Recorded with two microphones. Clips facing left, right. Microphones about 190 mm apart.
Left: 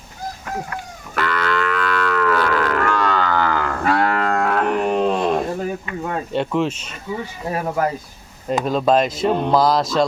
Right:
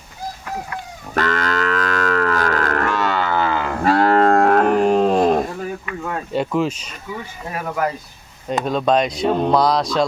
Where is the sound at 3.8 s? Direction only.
35° right (ahead or behind).